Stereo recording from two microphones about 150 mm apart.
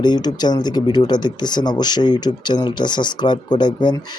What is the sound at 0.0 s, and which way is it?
Speech, 30° left (ahead or behind).